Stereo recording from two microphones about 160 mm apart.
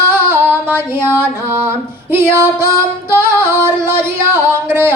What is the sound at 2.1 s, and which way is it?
Music, 15° right (ahead or behind).